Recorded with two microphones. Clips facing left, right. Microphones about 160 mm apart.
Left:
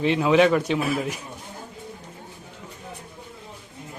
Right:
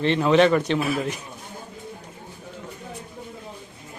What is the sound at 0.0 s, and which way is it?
Speech, 5° left (ahead or behind).